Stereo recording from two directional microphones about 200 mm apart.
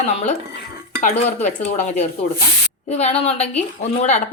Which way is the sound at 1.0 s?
35° left (ahead or behind).